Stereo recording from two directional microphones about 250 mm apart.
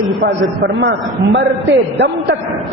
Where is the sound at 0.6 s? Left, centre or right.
Right.